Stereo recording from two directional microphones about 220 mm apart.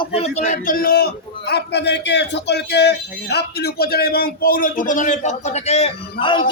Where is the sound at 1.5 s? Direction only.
50° left (ahead or behind).